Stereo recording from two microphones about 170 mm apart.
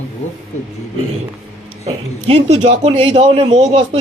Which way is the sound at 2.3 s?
35° right (ahead or behind).